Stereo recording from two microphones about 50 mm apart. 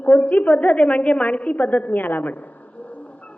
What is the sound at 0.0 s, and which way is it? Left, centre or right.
A woman's voice, left.